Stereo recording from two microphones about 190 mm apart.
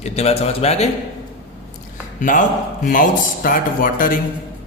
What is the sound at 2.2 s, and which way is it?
Speech, 45° left (ahead or behind).